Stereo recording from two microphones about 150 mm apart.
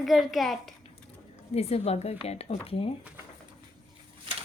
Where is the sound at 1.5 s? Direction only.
45° left (ahead or behind).